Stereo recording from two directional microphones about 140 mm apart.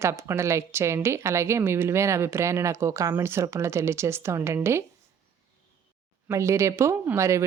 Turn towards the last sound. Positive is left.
turn(degrees=-20)  # may be behind; listen again after turning